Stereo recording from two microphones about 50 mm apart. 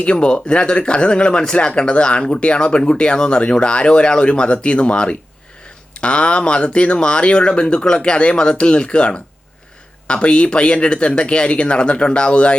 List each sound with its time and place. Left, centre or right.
0.0 s speech: centre